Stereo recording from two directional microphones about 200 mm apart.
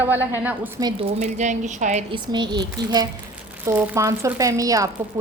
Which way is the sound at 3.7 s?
10° right (ahead or behind).